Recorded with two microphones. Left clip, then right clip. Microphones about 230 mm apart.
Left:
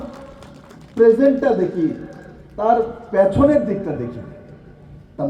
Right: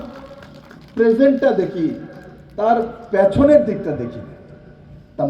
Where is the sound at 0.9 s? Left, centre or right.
Right.